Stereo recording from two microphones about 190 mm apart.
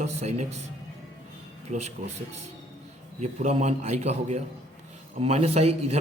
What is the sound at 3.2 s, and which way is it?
A man's voice, 35° right (ahead or behind).